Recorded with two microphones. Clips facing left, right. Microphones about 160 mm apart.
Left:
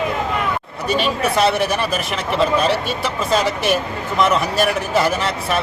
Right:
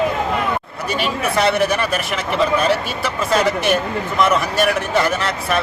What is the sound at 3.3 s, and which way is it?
Speech, centre (ahead or behind).